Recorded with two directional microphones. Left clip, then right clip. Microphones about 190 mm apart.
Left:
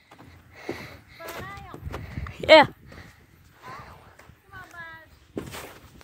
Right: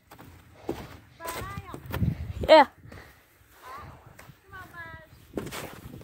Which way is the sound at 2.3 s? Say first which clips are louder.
Left 2 dB; 25° left (ahead or behind).